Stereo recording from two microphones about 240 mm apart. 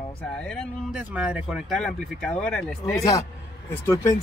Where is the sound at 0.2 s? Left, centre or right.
Centre.